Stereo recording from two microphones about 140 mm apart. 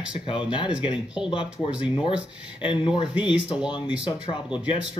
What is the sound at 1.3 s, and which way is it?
Speech, 35° left (ahead or behind).